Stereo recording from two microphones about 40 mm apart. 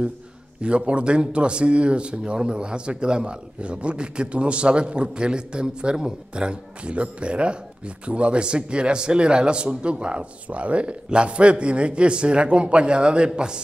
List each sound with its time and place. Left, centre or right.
0.6 s speech: right